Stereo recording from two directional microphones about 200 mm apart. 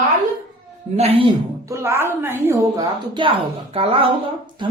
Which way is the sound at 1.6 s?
15° right (ahead or behind).